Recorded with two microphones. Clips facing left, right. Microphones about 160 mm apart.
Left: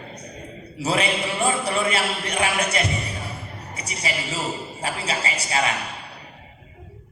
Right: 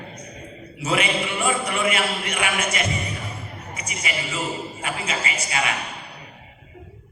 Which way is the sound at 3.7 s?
35° left (ahead or behind).